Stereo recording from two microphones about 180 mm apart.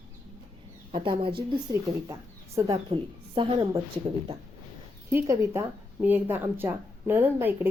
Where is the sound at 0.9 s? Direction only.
30° right (ahead or behind).